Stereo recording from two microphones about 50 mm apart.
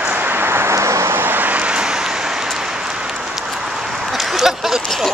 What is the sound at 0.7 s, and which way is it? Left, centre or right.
Vehicle, right.